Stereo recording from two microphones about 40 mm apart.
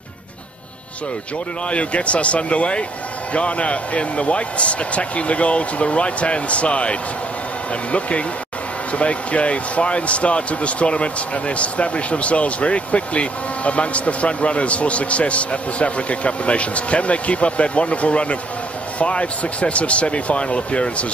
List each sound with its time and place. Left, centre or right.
1.7 s speech: left